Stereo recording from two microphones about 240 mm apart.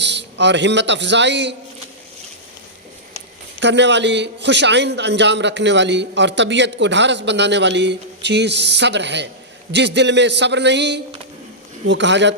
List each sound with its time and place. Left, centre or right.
0.0 s a man's voice: right
3.6 s a man's voice: right